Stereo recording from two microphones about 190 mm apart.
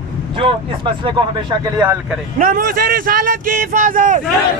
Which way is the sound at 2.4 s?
45° right (ahead or behind).